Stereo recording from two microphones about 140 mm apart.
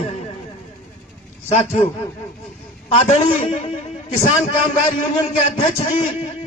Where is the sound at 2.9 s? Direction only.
45° left (ahead or behind).